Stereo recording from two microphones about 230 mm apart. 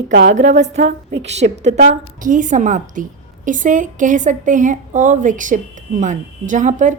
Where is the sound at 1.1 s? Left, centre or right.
Right.